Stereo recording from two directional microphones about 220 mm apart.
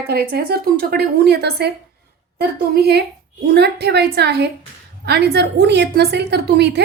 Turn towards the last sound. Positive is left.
turn(degrees=-50)  # may be behind; listen again after turning